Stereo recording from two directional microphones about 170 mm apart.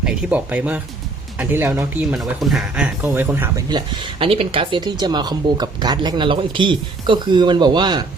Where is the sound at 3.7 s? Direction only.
30° right (ahead or behind).